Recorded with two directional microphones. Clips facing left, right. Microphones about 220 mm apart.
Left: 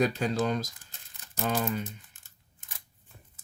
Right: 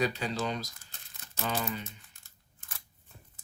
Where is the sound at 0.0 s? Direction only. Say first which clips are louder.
Left 5 dB; 50° left (ahead or behind).